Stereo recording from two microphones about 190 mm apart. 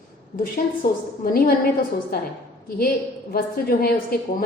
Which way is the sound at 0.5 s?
50° left (ahead or behind).